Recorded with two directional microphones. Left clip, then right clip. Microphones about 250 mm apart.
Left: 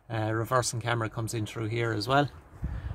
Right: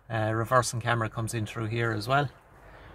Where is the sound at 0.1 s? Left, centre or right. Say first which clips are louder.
Right 3 dB; centre.